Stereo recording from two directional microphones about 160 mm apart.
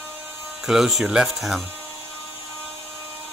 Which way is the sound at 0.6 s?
Centre (ahead or behind).